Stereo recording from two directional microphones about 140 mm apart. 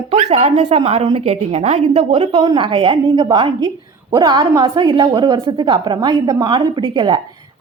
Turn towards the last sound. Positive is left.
turn(degrees=-35)  # may be behind; listen again after turning